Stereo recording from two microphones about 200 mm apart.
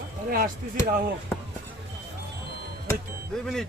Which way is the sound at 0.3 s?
45° right (ahead or behind).